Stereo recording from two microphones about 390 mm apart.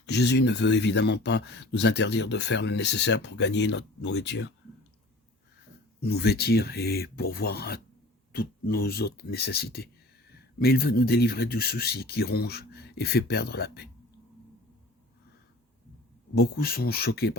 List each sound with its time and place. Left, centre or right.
0.0 s speech: left
6.0 s speech: left
16.3 s speech: left